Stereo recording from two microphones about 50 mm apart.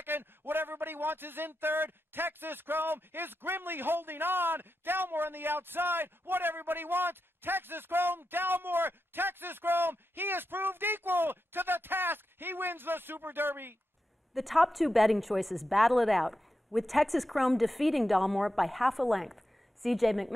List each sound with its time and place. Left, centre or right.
0.0 s speech: right
14.3 s a woman's voice: centre